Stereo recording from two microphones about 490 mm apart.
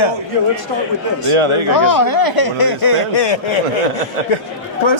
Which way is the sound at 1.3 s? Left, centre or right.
Right.